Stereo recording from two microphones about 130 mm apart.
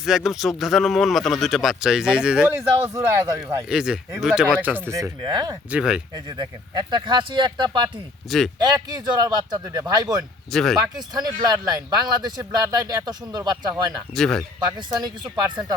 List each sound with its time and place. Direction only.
0.0 s speech: 5° right (ahead or behind)
2.9 s speech: 20° right (ahead or behind)
3.7 s speech: 5° right (ahead or behind); by 5.5 s 30° right (ahead or behind)
5.7 s speech: 5° right (ahead or behind)
6.1 s speech: 30° right (ahead or behind)
8.3 s speech: centre (ahead or behind)
8.6 s speech: 30° right (ahead or behind)
10.5 s speech: centre (ahead or behind)
10.8 s speech: 30° right (ahead or behind)
14.2 s speech: 5° left (ahead or behind)
14.6 s speech: 30° right (ahead or behind)